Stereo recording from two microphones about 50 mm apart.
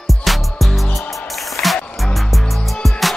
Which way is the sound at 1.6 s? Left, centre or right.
Left.